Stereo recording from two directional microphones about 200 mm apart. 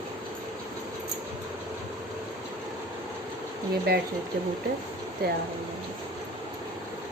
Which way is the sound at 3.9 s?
50° right (ahead or behind).